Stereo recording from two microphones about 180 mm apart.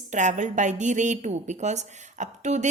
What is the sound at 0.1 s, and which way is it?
A woman's voice, 40° right (ahead or behind).